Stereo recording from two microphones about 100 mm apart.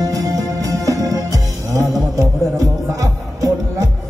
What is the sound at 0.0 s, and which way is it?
Music, 35° right (ahead or behind).